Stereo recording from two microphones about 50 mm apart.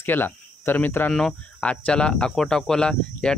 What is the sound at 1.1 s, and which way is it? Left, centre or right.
Speech, centre.